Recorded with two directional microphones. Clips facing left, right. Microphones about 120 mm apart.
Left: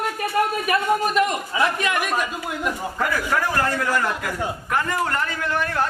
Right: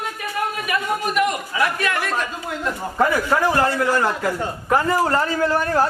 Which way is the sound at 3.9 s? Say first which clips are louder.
Right 3 dB; 30° right (ahead or behind).